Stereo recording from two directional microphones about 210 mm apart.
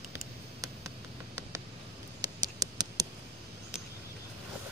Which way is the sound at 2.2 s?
20° right (ahead or behind).